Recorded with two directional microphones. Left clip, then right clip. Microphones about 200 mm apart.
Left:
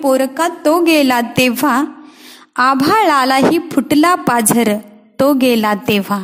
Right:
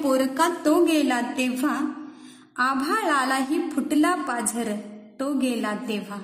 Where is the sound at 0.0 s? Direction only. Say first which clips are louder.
Left 8 dB; 35° left (ahead or behind).